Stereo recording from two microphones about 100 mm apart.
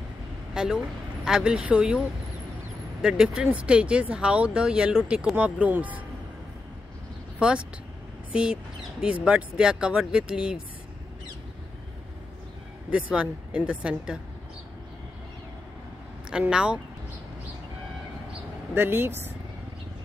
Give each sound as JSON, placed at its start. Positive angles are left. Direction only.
{"t": 0.6, "sound": "speech", "side_deg": -5}
{"t": 7.3, "sound": "speech", "side_deg": -10}
{"t": 12.9, "sound": "speech", "side_deg": -10}
{"t": 16.3, "sound": "speech", "side_deg": -10}
{"t": 18.8, "sound": "speech", "side_deg": -20}